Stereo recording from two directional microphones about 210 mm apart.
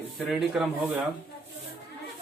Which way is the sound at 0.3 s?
Centre (ahead or behind).